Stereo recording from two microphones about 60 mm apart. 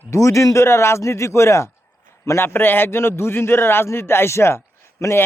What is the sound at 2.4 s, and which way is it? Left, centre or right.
A man's voice, left.